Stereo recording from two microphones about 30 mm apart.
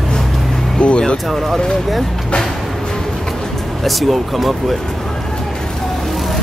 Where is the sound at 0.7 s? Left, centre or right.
Left.